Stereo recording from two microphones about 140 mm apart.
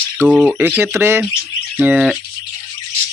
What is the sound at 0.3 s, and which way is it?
Speech, 5° right (ahead or behind).